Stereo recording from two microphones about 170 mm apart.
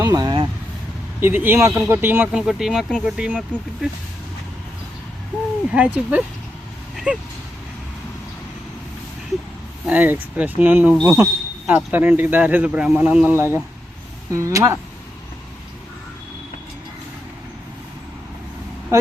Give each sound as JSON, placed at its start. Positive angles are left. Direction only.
{"t": 0.0, "sound": "speech", "side_deg": -20}
{"t": 1.2, "sound": "speech", "side_deg": -10}
{"t": 5.7, "sound": "speech", "side_deg": -10}
{"t": 6.9, "sound": "a sound", "side_deg": -5}
{"t": 9.8, "sound": "speech", "side_deg": -10}
{"t": 11.2, "sound": "a sound", "side_deg": -10}
{"t": 11.9, "sound": "speech", "side_deg": -10}